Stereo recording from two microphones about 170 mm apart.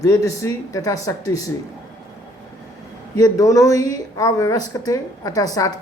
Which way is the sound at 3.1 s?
20° left (ahead or behind).